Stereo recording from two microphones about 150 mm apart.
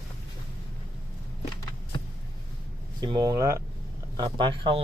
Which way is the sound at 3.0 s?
30° right (ahead or behind).